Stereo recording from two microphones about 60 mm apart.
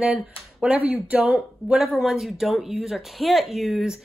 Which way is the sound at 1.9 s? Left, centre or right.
Centre.